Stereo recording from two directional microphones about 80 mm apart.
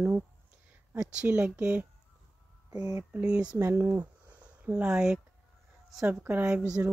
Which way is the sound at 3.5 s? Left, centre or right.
Right.